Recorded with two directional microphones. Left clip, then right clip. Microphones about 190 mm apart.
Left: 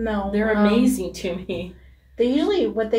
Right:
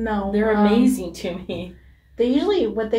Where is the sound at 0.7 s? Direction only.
15° left (ahead or behind).